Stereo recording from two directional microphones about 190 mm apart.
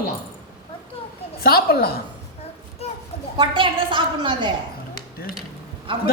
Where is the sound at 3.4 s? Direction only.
25° right (ahead or behind).